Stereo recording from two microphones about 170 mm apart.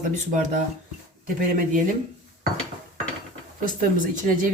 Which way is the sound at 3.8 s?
50° right (ahead or behind).